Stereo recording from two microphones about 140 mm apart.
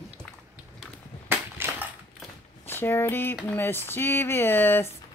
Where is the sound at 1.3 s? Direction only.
15° right (ahead or behind).